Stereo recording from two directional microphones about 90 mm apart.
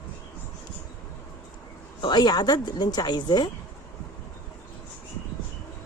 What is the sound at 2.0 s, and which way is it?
Speech, 50° left (ahead or behind).